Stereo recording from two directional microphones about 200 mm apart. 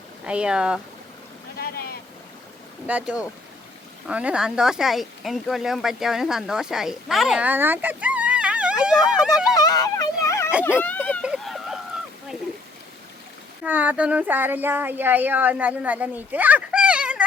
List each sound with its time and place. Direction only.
0.3 s speech: 5° right (ahead or behind)
1.5 s boat: 50° left (ahead or behind)
2.8 s speech: 5° right (ahead or behind)
9.6 s a sound: 20° left (ahead or behind)
10.8 s speech: 10° left (ahead or behind)
11.2 s a sound: centre (ahead or behind)
13.7 s speech: 10° right (ahead or behind)